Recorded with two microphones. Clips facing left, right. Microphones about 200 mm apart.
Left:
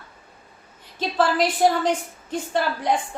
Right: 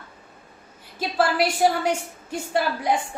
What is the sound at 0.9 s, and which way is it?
A woman's voice, 10° right (ahead or behind).